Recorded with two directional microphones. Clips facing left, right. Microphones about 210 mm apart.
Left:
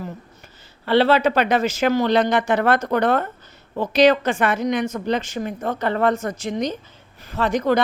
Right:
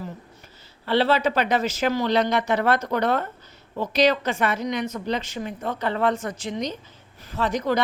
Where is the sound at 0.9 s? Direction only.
65° left (ahead or behind); by 6.7 s 50° left (ahead or behind).